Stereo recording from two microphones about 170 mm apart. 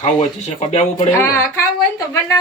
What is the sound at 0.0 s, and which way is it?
Speech, 40° left (ahead or behind).